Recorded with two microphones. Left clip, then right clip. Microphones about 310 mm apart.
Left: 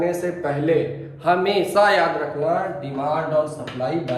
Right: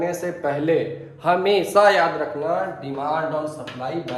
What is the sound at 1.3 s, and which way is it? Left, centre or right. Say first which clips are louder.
Speech: even; right.